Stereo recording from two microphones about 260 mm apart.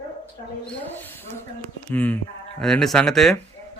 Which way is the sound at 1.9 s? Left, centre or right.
Centre.